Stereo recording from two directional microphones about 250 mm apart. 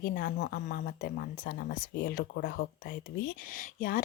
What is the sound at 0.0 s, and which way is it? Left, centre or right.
Speech, left.